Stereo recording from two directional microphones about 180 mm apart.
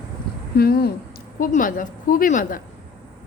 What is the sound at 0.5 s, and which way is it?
Speech, 60° left (ahead or behind).